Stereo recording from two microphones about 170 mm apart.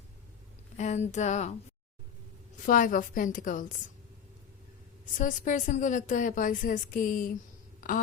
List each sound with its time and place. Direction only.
0.8 s a woman's voice: 40° left (ahead or behind)
2.6 s a woman's voice: 50° left (ahead or behind)
5.1 s a woman's voice: 50° left (ahead or behind)